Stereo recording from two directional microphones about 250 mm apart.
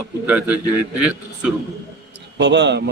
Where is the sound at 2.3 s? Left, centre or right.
Right.